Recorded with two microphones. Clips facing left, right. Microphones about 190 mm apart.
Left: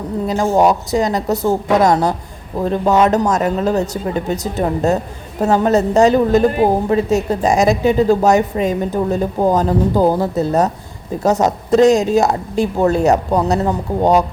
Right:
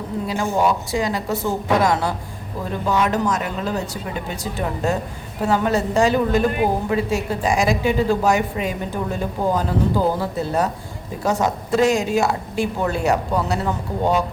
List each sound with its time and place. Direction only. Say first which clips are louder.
0.3 s a woman's voice: left 6 dB; 40° left (ahead or behind)